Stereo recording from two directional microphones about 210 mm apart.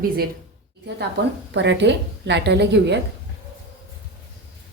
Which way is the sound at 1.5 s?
55° right (ahead or behind).